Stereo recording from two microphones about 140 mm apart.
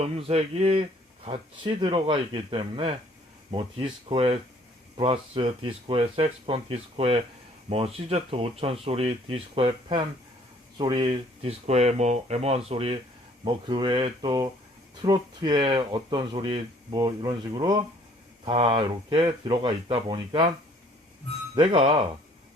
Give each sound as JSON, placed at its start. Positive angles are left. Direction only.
{"t": 0.0, "sound": "speech", "side_deg": -45}
{"t": 13.4, "sound": "speech", "side_deg": -35}
{"t": 18.4, "sound": "speech", "side_deg": -40}
{"t": 21.5, "sound": "speech", "side_deg": -35}